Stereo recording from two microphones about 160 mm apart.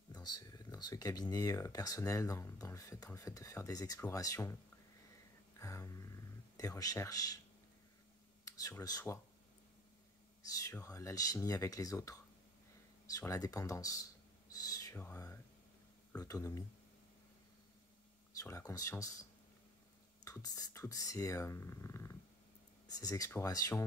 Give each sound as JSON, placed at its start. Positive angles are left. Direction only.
{"t": 0.1, "sound": "speech", "side_deg": 25}
{"t": 5.6, "sound": "a sound", "side_deg": 20}
{"t": 8.5, "sound": "speech", "side_deg": 20}
{"t": 10.4, "sound": "speech", "side_deg": 20}
{"t": 18.4, "sound": "speech", "side_deg": 20}
{"t": 20.2, "sound": "speech", "side_deg": 20}